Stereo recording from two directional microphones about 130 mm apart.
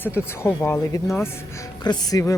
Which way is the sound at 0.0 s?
15° left (ahead or behind).